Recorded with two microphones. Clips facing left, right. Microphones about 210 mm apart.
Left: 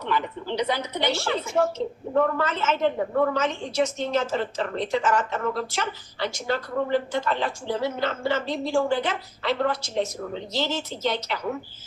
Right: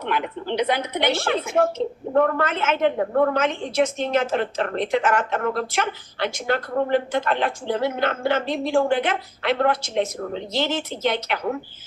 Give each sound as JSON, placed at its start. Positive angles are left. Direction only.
{"t": 0.0, "sound": "speech", "side_deg": -60}